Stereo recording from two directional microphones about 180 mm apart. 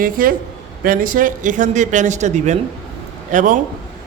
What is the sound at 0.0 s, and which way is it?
A man's voice, 50° right (ahead or behind).